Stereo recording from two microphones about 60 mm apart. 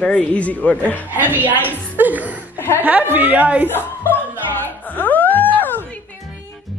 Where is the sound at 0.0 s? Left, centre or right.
Centre.